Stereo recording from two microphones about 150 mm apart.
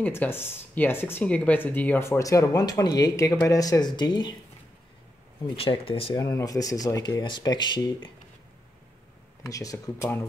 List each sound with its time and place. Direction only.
0.0 s speech: 15° left (ahead or behind); by 4.4 s 30° left (ahead or behind)
5.6 s speech: 40° left (ahead or behind)
6.1 s speech: 25° left (ahead or behind)
9.4 s speech: 20° left (ahead or behind)